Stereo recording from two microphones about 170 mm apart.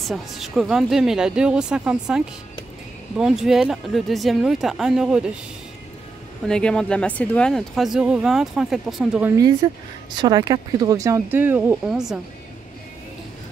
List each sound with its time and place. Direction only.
0.1 s speech: centre (ahead or behind)
6.4 s speech: 5° left (ahead or behind)
9.6 s speech: 25° right (ahead or behind); by 12.2 s 5° right (ahead or behind)